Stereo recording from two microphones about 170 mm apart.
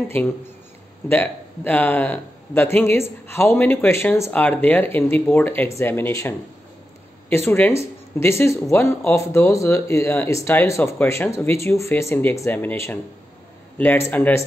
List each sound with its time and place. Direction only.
1.0 s speech: 10° left (ahead or behind)